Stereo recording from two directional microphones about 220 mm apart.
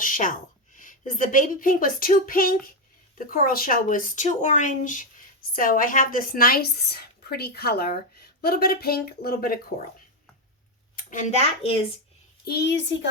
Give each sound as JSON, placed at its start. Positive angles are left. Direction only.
{"t": 0.0, "sound": "a woman's voice", "side_deg": 35}
{"t": 10.9, "sound": "speech", "side_deg": 35}
{"t": 12.5, "sound": "a child's voice", "side_deg": 50}